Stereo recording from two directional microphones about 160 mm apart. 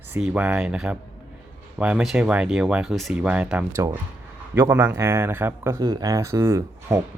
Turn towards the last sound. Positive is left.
turn(degrees=-15)  # may be behind; listen again after turning